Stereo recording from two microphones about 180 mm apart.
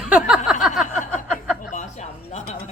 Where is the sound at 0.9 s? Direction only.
45° left (ahead or behind).